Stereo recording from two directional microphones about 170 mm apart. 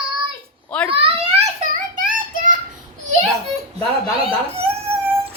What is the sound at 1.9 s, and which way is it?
Child singing, 55° right (ahead or behind).